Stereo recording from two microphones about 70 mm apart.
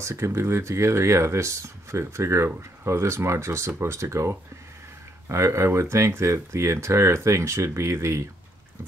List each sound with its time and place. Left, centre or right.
0.0 s speech: right